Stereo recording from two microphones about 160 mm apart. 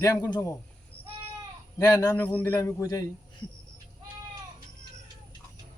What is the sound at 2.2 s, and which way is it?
Speech, 10° left (ahead or behind).